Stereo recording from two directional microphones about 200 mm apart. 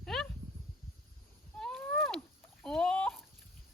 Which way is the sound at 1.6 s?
Centre (ahead or behind).